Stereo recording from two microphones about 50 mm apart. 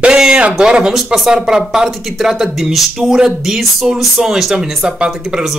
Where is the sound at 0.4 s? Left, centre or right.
Centre.